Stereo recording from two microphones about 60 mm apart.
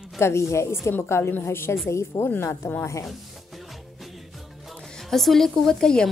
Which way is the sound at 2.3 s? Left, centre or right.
Left.